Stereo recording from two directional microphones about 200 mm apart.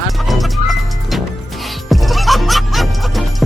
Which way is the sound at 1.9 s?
Centre (ahead or behind).